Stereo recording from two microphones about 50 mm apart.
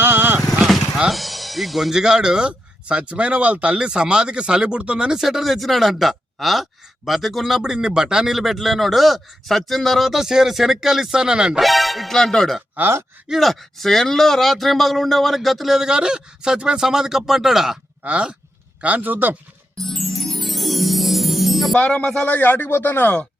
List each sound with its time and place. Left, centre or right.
0.0 s vehicle: right
1.1 s speech: centre; by 3.8 s right
3.8 s a man's voice: centre
7.6 s a man's voice: centre
11.6 s a man's voice: centre
15.9 s speech: centre
18.0 s a man's voice: right
19.8 s music: centre
21.8 s speech: centre
22.3 s speech: left